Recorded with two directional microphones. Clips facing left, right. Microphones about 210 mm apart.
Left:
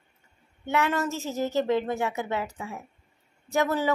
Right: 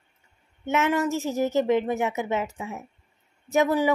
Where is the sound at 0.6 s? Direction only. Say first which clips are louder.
Right 3 dB; 20° right (ahead or behind).